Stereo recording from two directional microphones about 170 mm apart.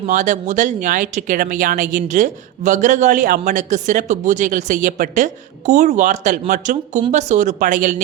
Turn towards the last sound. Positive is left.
turn(degrees=-50)  # may be behind; listen again after turning